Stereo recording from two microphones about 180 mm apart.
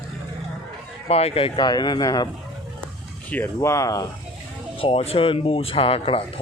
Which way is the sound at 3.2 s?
10° left (ahead or behind).